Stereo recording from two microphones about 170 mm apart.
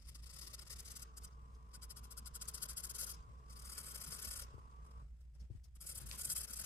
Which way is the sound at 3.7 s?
15° left (ahead or behind).